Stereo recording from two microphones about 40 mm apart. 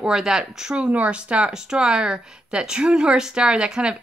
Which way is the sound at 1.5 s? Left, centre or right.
Centre.